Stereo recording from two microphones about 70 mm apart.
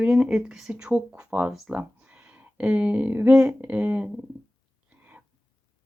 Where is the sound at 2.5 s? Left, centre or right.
Centre.